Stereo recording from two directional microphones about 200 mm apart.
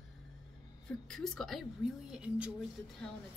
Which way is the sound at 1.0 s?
Centre (ahead or behind).